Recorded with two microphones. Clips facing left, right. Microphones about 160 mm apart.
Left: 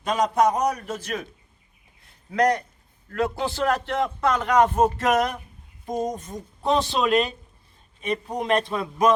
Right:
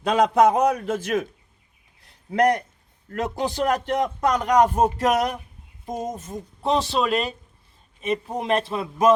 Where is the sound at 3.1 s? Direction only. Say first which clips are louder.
Left 1 dB; 20° right (ahead or behind).